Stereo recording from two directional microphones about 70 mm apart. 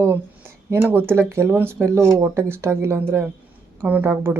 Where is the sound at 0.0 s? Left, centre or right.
Right.